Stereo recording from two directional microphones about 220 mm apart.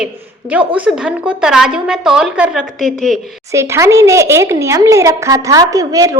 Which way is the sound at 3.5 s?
15° right (ahead or behind).